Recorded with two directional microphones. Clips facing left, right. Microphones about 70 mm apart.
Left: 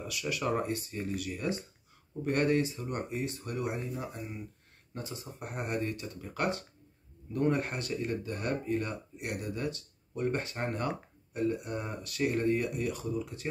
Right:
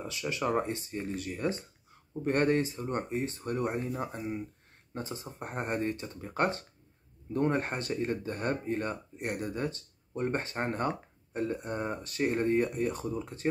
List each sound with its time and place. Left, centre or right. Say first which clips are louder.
0.0 s speech: right 1 dB; right
4.9 s speech: right 3 dB; right